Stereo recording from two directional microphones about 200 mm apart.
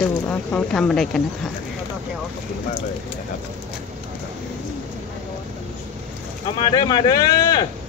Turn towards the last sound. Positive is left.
turn(degrees=20)  # may be behind; listen again after turning